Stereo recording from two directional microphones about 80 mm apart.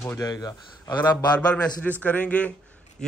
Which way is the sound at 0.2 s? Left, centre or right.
Left.